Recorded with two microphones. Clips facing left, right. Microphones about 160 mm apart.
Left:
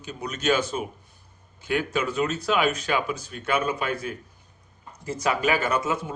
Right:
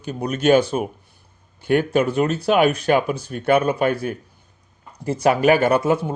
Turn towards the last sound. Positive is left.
turn(degrees=-65)  # may be behind; listen again after turning